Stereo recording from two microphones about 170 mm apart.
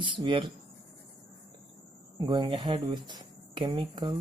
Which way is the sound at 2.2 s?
25° right (ahead or behind).